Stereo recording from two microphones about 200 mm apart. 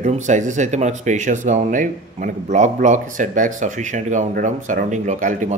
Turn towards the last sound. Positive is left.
turn(degrees=-40)  # may be behind; listen again after turning